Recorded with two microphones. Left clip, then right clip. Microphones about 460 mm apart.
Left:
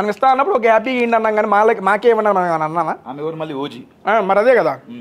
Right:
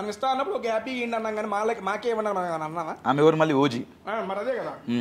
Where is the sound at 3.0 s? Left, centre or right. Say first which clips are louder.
Right 5 dB; right.